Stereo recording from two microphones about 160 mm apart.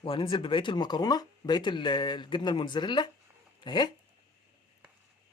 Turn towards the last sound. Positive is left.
turn(degrees=30)  # may be behind; listen again after turning